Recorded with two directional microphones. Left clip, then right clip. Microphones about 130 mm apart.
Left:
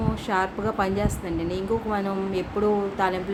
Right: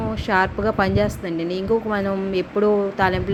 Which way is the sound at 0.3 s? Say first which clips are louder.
Right 6 dB; 35° right (ahead or behind).